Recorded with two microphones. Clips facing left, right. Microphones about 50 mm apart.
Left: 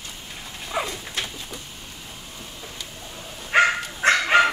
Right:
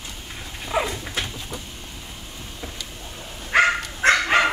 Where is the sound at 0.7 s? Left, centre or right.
Right.